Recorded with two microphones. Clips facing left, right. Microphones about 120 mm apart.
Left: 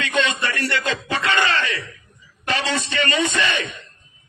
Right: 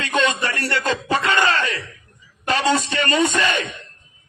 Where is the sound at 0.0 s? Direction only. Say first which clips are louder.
Right 1 dB; 40° right (ahead or behind).